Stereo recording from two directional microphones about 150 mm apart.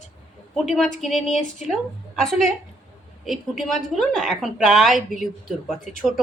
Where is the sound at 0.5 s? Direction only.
Centre (ahead or behind).